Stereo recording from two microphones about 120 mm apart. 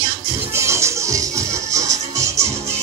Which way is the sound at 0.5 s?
25° right (ahead or behind).